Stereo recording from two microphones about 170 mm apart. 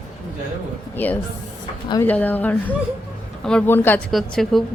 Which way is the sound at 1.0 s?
10° left (ahead or behind).